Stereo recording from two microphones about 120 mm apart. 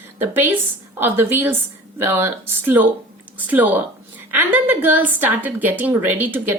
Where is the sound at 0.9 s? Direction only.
20° right (ahead or behind).